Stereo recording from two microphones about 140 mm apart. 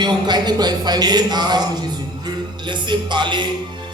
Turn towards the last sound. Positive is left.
turn(degrees=-35)  # may be behind; listen again after turning